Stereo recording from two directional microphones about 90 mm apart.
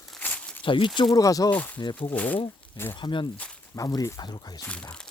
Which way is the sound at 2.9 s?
60° left (ahead or behind).